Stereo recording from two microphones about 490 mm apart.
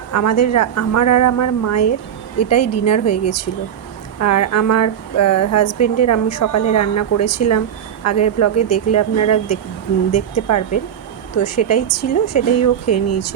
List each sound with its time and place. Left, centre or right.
0.1 s a woman's voice: left